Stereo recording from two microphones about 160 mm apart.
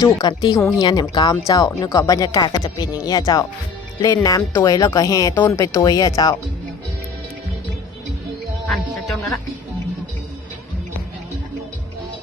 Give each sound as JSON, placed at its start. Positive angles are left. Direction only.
{"t": 0.0, "sound": "speech", "side_deg": 25}
{"t": 8.6, "sound": "music", "side_deg": 5}